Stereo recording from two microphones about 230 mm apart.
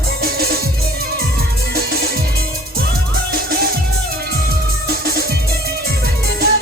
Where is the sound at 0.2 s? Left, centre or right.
Right.